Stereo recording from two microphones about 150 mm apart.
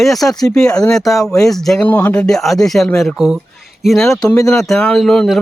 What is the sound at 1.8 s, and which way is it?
Speech, 15° left (ahead or behind).